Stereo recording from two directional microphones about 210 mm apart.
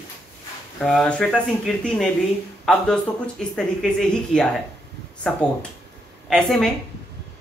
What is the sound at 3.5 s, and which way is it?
A man's voice, 5° left (ahead or behind).